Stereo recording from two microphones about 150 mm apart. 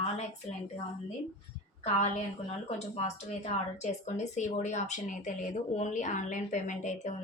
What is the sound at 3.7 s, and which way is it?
Speech, 50° left (ahead or behind).